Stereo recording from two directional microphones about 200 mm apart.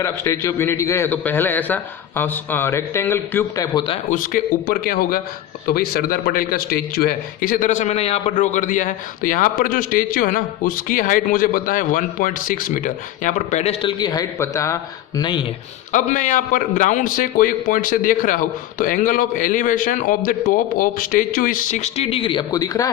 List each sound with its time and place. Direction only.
0.0 s a man's voice: 15° left (ahead or behind)
4.1 s a man's voice: 45° left (ahead or behind); by 15.4 s 20° left (ahead or behind)
15.9 s a man's voice: 40° left (ahead or behind); by 22.9 s 20° left (ahead or behind)